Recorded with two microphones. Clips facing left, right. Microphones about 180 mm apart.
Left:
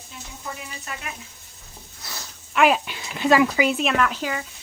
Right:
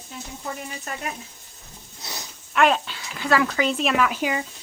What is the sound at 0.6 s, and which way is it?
Speech, 45° right (ahead or behind).